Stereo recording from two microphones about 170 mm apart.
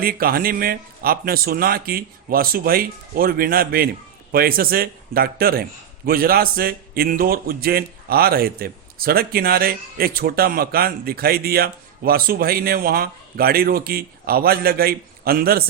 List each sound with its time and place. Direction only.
0.0 s a man's voice: 60° right (ahead or behind)